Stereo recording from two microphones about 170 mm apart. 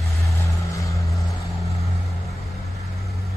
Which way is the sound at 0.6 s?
20° left (ahead or behind).